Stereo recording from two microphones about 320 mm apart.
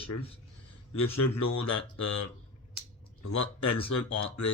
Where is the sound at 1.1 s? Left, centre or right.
Left.